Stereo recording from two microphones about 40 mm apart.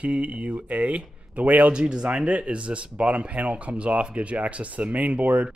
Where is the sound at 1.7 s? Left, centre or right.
Right.